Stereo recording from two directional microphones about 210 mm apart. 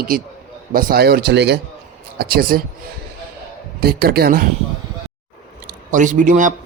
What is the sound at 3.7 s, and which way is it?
Speech, 45° right (ahead or behind).